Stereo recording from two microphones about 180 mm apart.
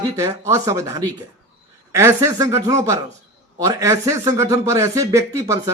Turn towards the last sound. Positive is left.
turn(degrees=-15)  # may be behind; listen again after turning